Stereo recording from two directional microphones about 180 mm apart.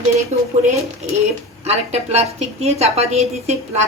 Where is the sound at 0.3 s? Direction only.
40° right (ahead or behind).